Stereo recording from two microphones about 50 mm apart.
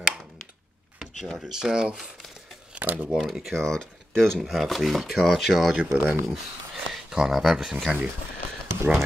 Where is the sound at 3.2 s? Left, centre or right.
Centre.